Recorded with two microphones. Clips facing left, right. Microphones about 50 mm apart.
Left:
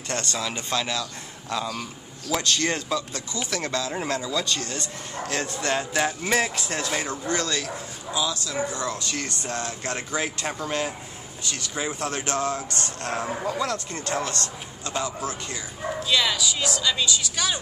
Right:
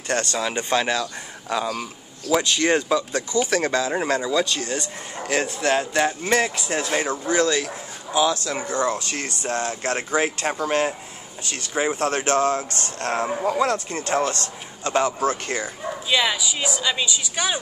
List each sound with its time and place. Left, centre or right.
0.1 s a man's voice: right
1.5 s a man's voice: centre
5.6 s speech: centre
6.8 s a man's voice: right
7.6 s speech: right
8.8 s a man's voice: right
13.3 s speech: centre
13.6 s speech: right
16.1 s a man's voice: centre